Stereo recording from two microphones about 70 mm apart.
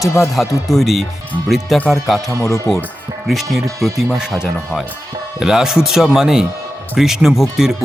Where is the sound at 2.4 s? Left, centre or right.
Left.